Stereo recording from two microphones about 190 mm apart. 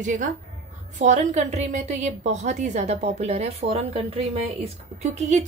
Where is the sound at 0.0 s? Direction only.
40° right (ahead or behind).